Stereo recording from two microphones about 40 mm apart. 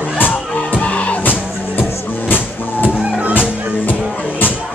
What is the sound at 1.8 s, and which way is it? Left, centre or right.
Music, left.